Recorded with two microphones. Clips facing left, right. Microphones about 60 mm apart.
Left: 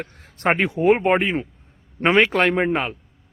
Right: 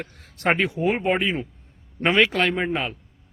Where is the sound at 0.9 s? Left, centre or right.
Left.